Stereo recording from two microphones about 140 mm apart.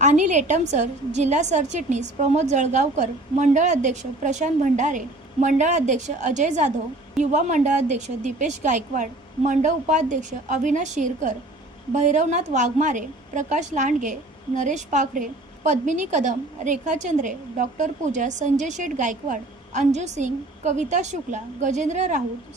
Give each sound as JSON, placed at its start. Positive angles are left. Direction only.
{"t": 0.0, "sound": "a woman's voice", "side_deg": -60}